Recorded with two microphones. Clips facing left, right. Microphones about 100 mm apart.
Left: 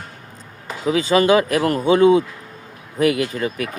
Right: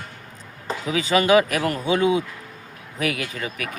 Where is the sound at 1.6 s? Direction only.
35° left (ahead or behind).